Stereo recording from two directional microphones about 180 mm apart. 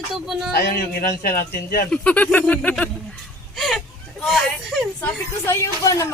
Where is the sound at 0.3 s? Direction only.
Centre (ahead or behind).